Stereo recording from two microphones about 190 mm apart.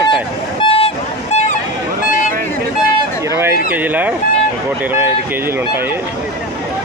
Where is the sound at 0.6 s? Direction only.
30° left (ahead or behind).